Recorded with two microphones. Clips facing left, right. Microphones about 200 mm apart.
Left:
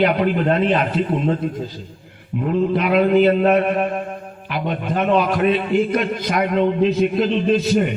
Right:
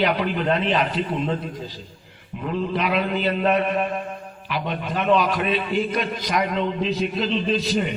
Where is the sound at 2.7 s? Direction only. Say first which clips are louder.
Left 8 dB; 50° left (ahead or behind).